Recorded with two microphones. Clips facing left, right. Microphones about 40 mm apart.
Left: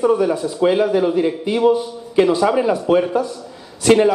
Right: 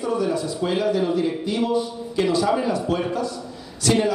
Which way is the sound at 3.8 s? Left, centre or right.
Left.